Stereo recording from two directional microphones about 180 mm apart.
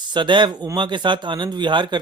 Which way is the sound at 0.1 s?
25° right (ahead or behind).